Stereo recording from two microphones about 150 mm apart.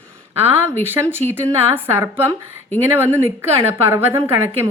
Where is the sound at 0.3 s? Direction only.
15° right (ahead or behind).